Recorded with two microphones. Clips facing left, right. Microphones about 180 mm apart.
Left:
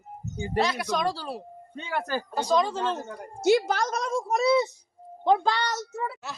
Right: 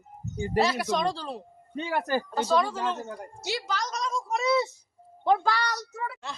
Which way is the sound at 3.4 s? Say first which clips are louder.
Left 11 dB; 50° left (ahead or behind).